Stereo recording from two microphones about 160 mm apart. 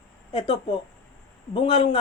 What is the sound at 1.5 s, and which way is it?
Speech, 35° left (ahead or behind).